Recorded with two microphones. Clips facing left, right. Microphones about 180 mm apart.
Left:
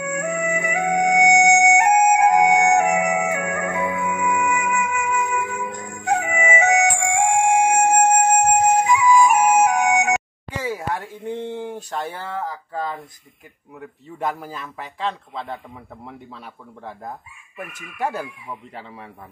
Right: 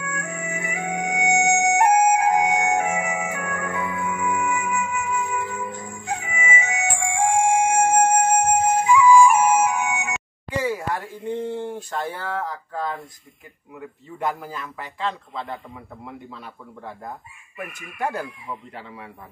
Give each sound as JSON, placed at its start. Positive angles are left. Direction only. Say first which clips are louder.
{"t": 0.0, "sound": "music", "louder": "left 8 dB", "side_deg": 70}
{"t": 11.5, "sound": "speech", "louder": "even", "side_deg": 10}